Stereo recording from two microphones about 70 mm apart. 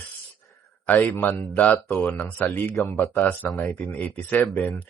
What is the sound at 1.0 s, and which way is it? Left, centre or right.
Speech, left.